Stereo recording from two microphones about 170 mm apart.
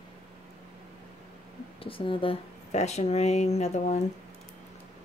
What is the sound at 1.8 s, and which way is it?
Speech, 30° left (ahead or behind).